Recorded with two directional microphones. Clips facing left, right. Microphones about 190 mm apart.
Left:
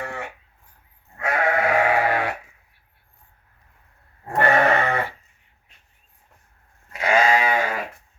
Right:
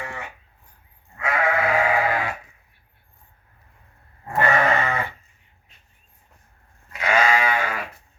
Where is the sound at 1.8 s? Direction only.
65° left (ahead or behind).